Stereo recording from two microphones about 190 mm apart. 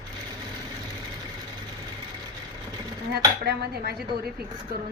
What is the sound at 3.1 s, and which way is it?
Speech, 55° right (ahead or behind).